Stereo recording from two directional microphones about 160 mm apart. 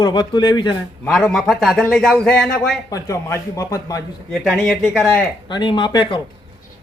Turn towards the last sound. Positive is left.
turn(degrees=30)  # may be behind; listen again after turning